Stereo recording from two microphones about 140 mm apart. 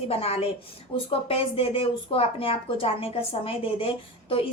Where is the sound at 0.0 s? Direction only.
45° left (ahead or behind).